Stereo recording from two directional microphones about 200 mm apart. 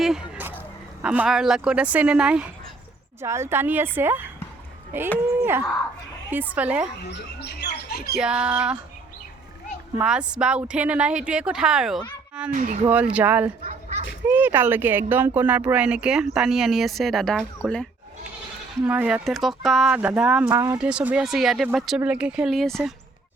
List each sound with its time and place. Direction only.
0.0 s a sound: centre (ahead or behind)
1.0 s a woman's voice: 5° right (ahead or behind)
7.1 s speech: 55° left (ahead or behind)
8.2 s speech: 5° right (ahead or behind)
10.0 s speech: 5° right (ahead or behind)
12.5 s speech: 40° right (ahead or behind)
12.9 s a woman's voice: 5° right (ahead or behind)
20.5 s a woman's voice: 15° right (ahead or behind); by 22.9 s centre (ahead or behind)